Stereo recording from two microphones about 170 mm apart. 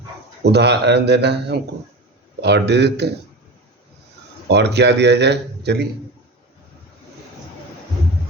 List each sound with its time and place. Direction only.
0.4 s a man's voice: 80° right
4.4 s a man's voice: 85° right